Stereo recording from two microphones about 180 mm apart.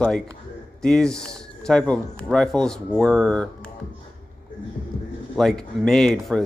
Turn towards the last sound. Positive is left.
turn(degrees=0)  # may be behind; listen again after turning